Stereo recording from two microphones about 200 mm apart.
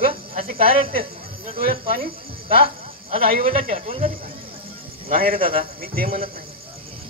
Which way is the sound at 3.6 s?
35° right (ahead or behind).